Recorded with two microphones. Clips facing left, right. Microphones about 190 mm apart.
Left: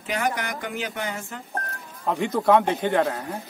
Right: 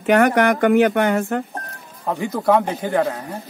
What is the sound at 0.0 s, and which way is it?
Speech, 65° right (ahead or behind).